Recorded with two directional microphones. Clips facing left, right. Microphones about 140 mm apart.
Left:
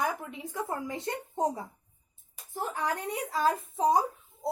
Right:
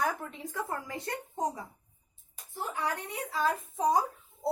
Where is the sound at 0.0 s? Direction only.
10° left (ahead or behind).